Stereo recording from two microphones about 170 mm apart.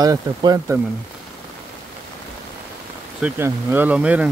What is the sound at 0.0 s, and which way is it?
Speech, 25° right (ahead or behind).